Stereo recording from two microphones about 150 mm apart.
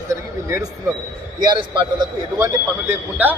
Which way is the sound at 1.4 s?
30° right (ahead or behind).